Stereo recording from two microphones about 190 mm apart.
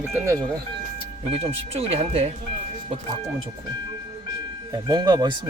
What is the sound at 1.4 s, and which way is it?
Speech, 30° right (ahead or behind).